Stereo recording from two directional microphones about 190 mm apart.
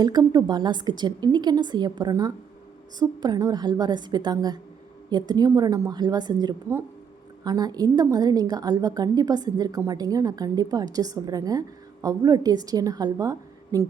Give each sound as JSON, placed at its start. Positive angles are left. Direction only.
{"t": 0.0, "sound": "a woman's voice", "side_deg": -20}